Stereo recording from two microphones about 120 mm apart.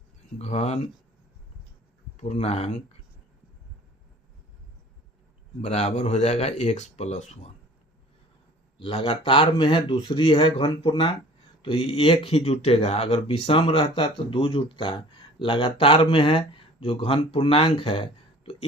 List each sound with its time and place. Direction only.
0.3 s speech: 65° left (ahead or behind)
2.2 s speech: 60° left (ahead or behind)
5.6 s speech: 65° left (ahead or behind)
8.8 s speech: 45° left (ahead or behind)